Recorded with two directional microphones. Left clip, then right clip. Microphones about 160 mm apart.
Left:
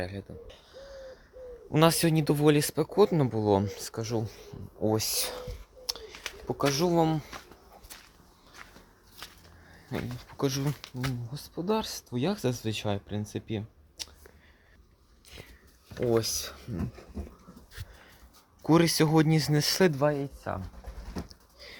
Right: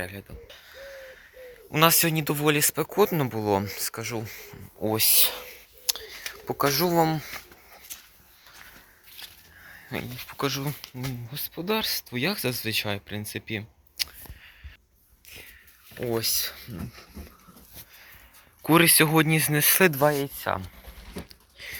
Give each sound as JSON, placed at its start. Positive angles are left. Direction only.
{"t": 0.0, "sound": "a sound", "side_deg": 10}
{"t": 1.7, "sound": "speech", "side_deg": 25}
{"t": 2.7, "sound": "speech", "side_deg": 10}
{"t": 4.9, "sound": "a sound", "side_deg": 10}
{"t": 6.5, "sound": "speech", "side_deg": 0}
{"t": 9.9, "sound": "speech", "side_deg": 5}
{"t": 10.4, "sound": "speech", "side_deg": 20}
{"t": 11.6, "sound": "speech", "side_deg": 0}
{"t": 16.0, "sound": "speech", "side_deg": 15}
{"t": 18.7, "sound": "speech", "side_deg": 25}
{"t": 19.9, "sound": "speech", "side_deg": 0}